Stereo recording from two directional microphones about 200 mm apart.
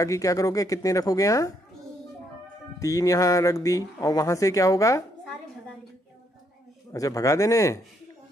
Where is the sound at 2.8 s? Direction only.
15° left (ahead or behind).